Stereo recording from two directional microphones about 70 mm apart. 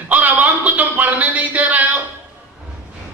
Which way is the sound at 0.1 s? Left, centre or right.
Right.